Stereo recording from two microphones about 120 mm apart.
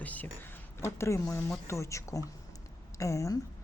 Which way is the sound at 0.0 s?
15° left (ahead or behind).